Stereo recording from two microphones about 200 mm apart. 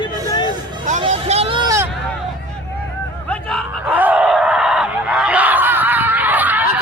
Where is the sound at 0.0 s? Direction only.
20° left (ahead or behind).